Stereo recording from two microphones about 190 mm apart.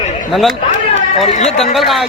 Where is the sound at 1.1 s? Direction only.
35° left (ahead or behind).